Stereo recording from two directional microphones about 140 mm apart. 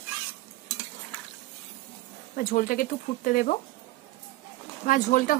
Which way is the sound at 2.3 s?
70° left (ahead or behind).